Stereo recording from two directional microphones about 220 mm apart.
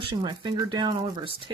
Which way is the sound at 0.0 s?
20° right (ahead or behind).